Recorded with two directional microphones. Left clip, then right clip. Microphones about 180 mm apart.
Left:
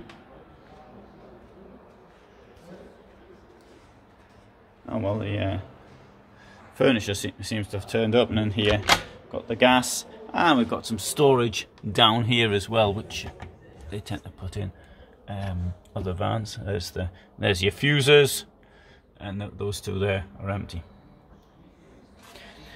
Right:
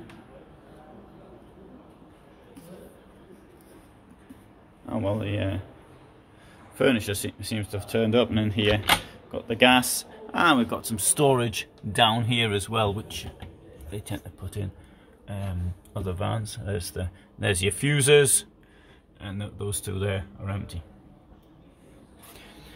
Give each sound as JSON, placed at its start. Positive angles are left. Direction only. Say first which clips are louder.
{"t": 4.8, "sound": "speech", "louder": "even", "side_deg": 5}
{"t": 6.8, "sound": "speech", "louder": "left 1 dB", "side_deg": 15}
{"t": 11.9, "sound": "speech", "louder": "left 2 dB", "side_deg": 20}
{"t": 13.8, "sound": "speech", "louder": "left 1 dB", "side_deg": 30}
{"t": 15.2, "sound": "speech", "louder": "left 2 dB", "side_deg": 10}
{"t": 19.1, "sound": "speech", "louder": "left 3 dB", "side_deg": 25}